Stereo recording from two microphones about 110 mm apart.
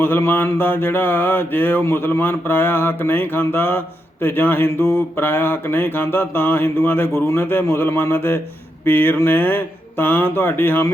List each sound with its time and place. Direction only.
0.0 s mantra: 20° left (ahead or behind)
8.8 s speech: 20° left (ahead or behind)